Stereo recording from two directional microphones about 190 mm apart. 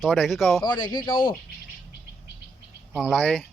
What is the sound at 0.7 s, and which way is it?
Speech, 25° left (ahead or behind).